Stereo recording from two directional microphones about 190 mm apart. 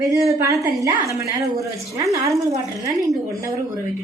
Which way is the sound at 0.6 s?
15° right (ahead or behind).